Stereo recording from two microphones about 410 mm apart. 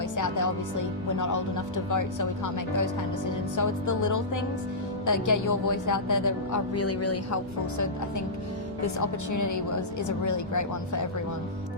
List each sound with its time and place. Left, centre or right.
0.2 s a woman's voice: left
8.8 s a woman's voice: left